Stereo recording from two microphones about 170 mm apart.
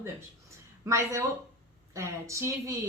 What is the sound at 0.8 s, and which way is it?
Speech, 15° right (ahead or behind).